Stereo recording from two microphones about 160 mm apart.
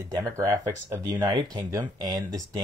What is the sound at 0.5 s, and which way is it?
A man's voice, 15° right (ahead or behind).